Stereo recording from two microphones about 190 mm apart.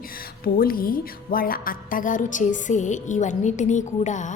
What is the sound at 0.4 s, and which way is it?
Music, 50° left (ahead or behind).